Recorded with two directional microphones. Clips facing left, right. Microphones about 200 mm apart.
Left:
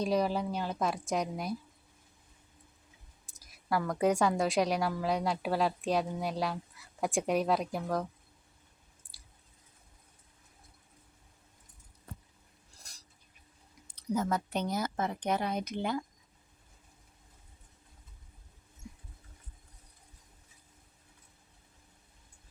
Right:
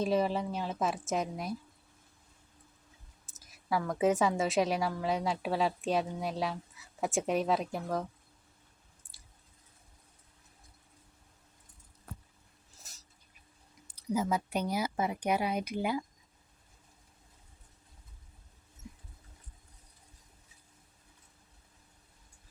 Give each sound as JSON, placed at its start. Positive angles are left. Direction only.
{"t": 0.0, "sound": "a woman's voice", "side_deg": 0}
{"t": 3.3, "sound": "a woman's voice", "side_deg": 0}
{"t": 9.0, "sound": "chewing", "side_deg": 35}
{"t": 12.7, "sound": "a sound", "side_deg": -5}
{"t": 13.8, "sound": "speech", "side_deg": -10}